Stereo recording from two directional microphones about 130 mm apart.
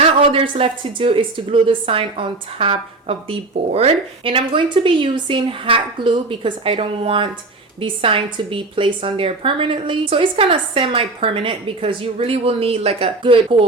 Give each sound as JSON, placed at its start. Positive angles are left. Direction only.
{"t": 0.0, "sound": "a woman's voice", "side_deg": -45}